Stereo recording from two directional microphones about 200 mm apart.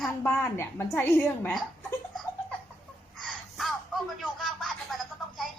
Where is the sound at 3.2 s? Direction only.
Centre (ahead or behind).